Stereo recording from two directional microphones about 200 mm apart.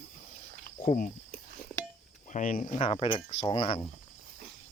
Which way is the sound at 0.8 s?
45° left (ahead or behind).